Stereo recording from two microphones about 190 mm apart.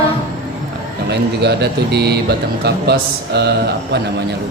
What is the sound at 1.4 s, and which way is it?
Speech, 60° right (ahead or behind).